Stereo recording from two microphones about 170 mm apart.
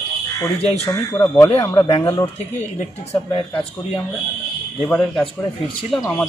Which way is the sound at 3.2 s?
30° left (ahead or behind).